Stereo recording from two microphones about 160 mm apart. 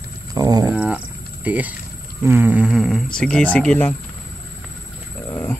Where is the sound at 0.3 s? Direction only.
25° right (ahead or behind).